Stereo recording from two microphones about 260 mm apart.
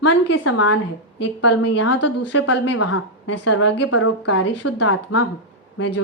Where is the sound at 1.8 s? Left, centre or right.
Left.